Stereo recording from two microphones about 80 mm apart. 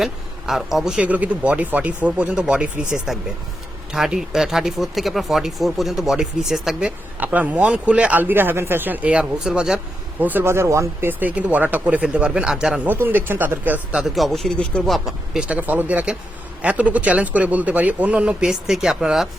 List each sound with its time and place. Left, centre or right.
0.0 s speech: centre
7.2 s speech: right
10.4 s speech: right
11.1 s speech: right
12.9 s speech: right
13.9 s speech: centre
14.6 s speech: centre
14.8 s speech: centre